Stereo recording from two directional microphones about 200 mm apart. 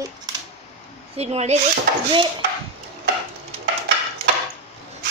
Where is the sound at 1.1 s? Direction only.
35° right (ahead or behind).